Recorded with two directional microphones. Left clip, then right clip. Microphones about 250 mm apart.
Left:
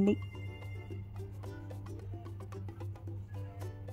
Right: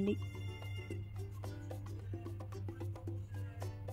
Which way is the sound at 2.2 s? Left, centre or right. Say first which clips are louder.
Even; centre.